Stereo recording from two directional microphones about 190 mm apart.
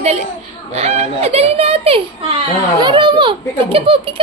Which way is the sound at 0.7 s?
35° right (ahead or behind).